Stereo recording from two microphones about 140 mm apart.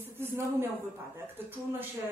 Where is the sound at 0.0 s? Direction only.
15° right (ahead or behind).